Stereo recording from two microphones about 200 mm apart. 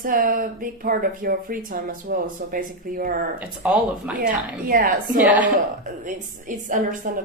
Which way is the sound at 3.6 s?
5° right (ahead or behind).